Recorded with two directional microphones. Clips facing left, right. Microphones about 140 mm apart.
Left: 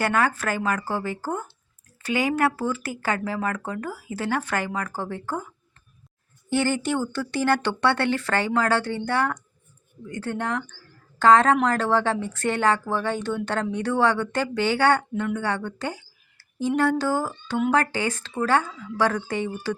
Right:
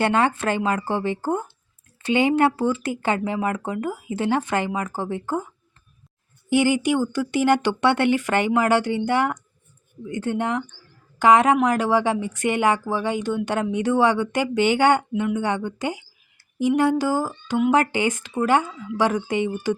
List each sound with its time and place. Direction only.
0.0 s speech: 25° right (ahead or behind)
6.5 s speech: 15° right (ahead or behind)